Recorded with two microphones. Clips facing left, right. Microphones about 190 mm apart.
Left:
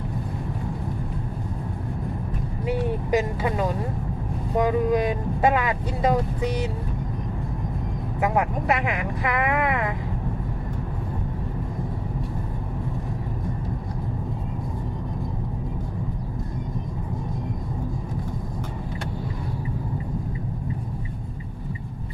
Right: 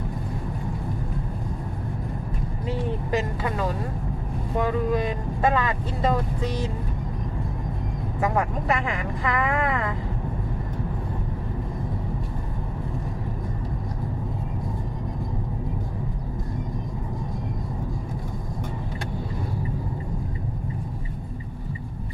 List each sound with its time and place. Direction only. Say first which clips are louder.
2.6 s vehicle: left 3 dB; 15° left (ahead or behind)
4.6 s speech: left 3 dB; 15° left (ahead or behind)
8.2 s speech: left 1 dB; 15° left (ahead or behind)